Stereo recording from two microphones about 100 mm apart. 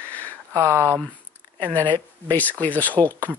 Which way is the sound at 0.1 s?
15° left (ahead or behind).